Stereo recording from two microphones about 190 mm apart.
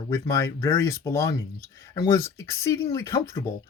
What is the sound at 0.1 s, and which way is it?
Speech, 15° left (ahead or behind).